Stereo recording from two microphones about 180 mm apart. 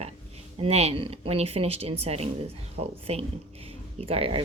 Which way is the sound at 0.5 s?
35° right (ahead or behind).